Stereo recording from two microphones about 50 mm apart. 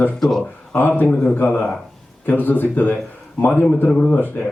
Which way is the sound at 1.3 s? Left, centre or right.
Left.